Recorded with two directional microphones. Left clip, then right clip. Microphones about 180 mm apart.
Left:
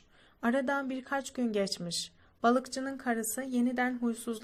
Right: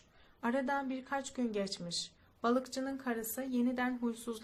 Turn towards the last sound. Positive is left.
turn(degrees=25)  # may be behind; listen again after turning